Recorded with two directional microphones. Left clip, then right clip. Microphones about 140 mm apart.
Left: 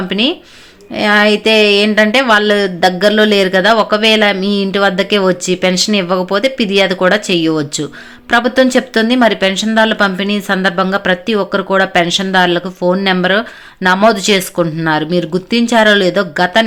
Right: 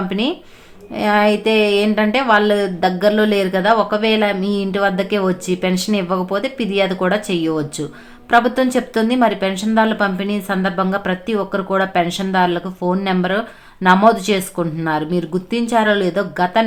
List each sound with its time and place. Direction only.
0.1 s speech: 15° left (ahead or behind)